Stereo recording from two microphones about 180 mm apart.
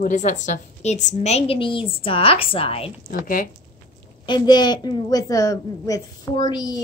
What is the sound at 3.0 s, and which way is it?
Speech, 50° left (ahead or behind).